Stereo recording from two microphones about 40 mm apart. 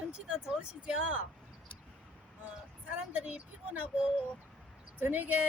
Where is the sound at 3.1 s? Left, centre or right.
Right.